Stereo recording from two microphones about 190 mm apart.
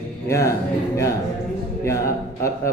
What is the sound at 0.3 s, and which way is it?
Speech, 15° left (ahead or behind).